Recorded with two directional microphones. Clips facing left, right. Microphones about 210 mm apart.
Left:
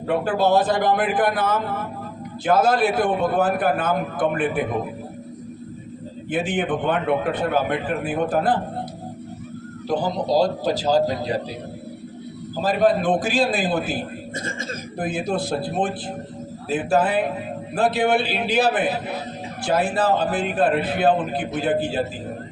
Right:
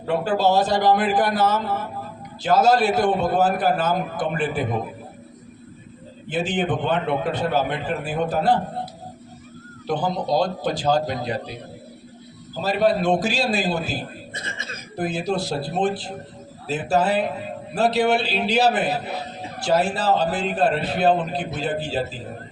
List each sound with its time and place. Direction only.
0.1 s a man's voice: 55° left (ahead or behind)
6.3 s a man's voice: 55° left (ahead or behind)
9.8 s a man's voice: 40° left (ahead or behind)
12.6 s a man's voice: 50° left (ahead or behind)